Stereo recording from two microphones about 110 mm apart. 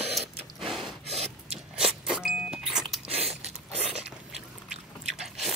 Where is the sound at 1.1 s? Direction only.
70° right (ahead or behind).